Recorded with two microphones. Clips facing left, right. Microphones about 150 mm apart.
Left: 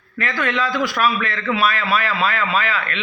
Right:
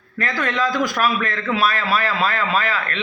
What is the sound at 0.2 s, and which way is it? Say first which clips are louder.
A man's voice: even; 40° right (ahead or behind).